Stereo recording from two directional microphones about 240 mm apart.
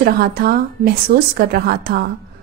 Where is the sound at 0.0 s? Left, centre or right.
Right.